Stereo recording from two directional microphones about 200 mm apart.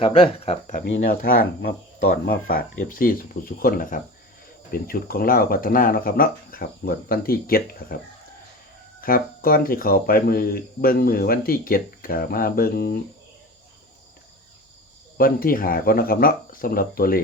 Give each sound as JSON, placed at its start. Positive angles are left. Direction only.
{"t": 0.0, "sound": "speech", "side_deg": 25}
{"t": 0.9, "sound": "speech", "side_deg": 50}
{"t": 9.0, "sound": "speech", "side_deg": 45}
{"t": 15.2, "sound": "speech", "side_deg": 45}